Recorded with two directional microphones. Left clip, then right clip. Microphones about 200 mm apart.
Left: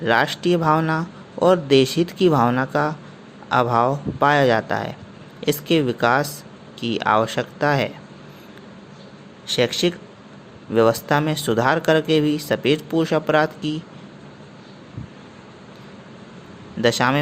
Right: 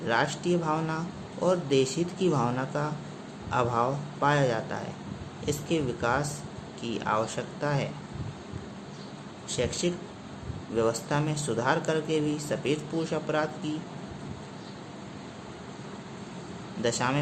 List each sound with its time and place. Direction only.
0.0 s a man's voice: 35° left (ahead or behind)
9.6 s a man's voice: 35° left (ahead or behind)
16.8 s a man's voice: 35° left (ahead or behind)